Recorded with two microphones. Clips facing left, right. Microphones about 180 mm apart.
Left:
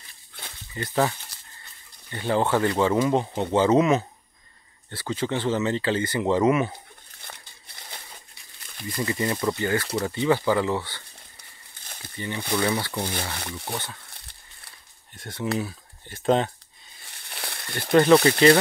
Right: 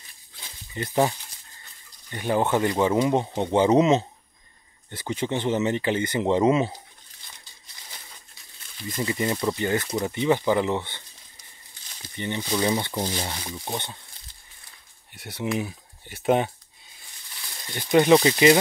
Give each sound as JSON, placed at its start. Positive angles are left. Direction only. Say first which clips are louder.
{"t": 0.7, "sound": "speech", "louder": "right 1 dB", "side_deg": -20}
{"t": 7.2, "sound": "a sound", "louder": "left 6 dB", "side_deg": 60}
{"t": 8.9, "sound": "speech", "louder": "even", "side_deg": -20}
{"t": 11.8, "sound": "snake", "louder": "left 2 dB", "side_deg": 55}
{"t": 12.5, "sound": "speech", "louder": "right 1 dB", "side_deg": -20}
{"t": 13.3, "sound": "speech", "louder": "even", "side_deg": 65}
{"t": 13.7, "sound": "speech", "louder": "right 2 dB", "side_deg": -20}
{"t": 14.1, "sound": "a sound", "louder": "left 3 dB", "side_deg": 65}
{"t": 15.1, "sound": "speech", "louder": "even", "side_deg": -10}
{"t": 17.0, "sound": "a sound", "louder": "left 9 dB", "side_deg": 70}
{"t": 17.9, "sound": "speech", "louder": "left 1 dB", "side_deg": -15}